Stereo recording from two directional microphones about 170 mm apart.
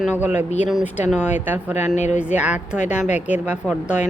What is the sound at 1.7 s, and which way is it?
Speech, 40° left (ahead or behind).